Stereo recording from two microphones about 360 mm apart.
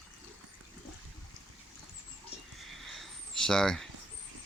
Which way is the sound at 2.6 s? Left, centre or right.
Centre.